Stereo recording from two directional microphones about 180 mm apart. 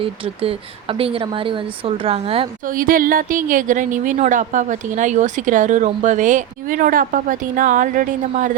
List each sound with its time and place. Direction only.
0.0 s speech: 30° right (ahead or behind)
2.6 s a woman's voice: 50° right (ahead or behind)